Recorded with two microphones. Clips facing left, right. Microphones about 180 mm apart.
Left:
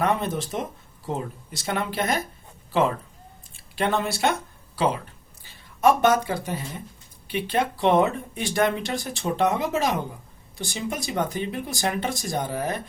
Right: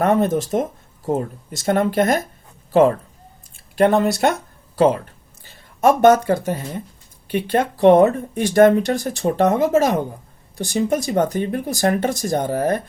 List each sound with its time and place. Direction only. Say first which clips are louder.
0.0 s speech: right 7 dB; 45° right (ahead or behind)
3.5 s speech: right 9 dB; 45° right (ahead or behind)